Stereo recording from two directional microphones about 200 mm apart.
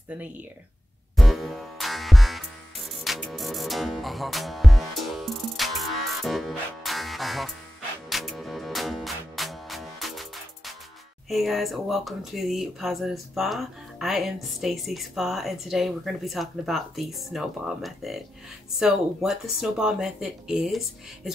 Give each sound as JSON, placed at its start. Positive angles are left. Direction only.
{"t": 1.1, "sound": "music", "side_deg": 0}
{"t": 11.2, "sound": "speech", "side_deg": 0}